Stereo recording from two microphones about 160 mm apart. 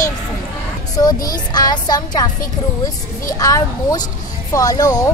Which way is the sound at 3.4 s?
20° left (ahead or behind).